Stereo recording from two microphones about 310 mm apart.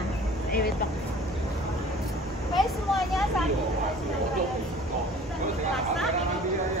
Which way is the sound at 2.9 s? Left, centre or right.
Centre.